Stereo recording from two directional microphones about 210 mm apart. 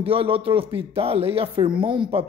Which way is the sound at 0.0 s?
25° right (ahead or behind).